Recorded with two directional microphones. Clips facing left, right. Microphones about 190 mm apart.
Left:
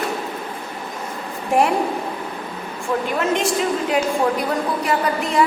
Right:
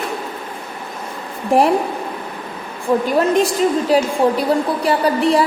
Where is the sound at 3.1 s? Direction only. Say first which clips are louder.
Right 4 dB; 35° right (ahead or behind).